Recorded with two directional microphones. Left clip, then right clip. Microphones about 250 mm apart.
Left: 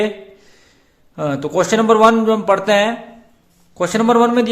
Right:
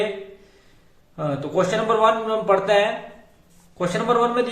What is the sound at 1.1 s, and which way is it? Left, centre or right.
A man's voice, left.